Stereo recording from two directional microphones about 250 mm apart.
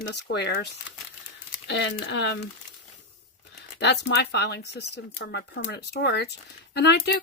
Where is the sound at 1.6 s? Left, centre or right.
Left.